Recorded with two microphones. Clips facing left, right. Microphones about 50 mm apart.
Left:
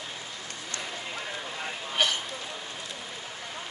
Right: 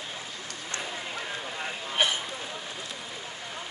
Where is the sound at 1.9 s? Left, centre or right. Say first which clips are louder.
Even; centre.